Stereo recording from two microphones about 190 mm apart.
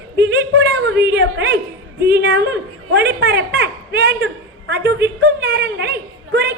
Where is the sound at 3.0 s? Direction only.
60° right (ahead or behind).